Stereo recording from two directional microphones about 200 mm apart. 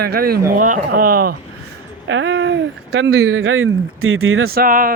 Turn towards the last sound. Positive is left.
turn(degrees=-45)  # may be behind; listen again after turning